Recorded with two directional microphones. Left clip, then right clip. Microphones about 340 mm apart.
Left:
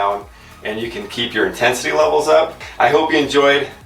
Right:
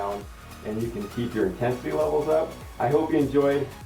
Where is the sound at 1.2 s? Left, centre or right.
Centre.